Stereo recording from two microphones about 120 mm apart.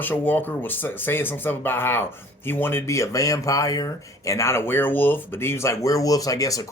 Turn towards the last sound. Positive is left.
turn(degrees=30)  # may be behind; listen again after turning